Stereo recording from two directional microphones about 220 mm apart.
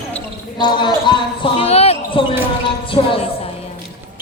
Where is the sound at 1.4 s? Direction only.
25° left (ahead or behind).